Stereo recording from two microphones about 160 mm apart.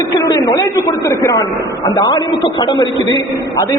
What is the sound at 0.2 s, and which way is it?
A man's voice, 20° left (ahead or behind).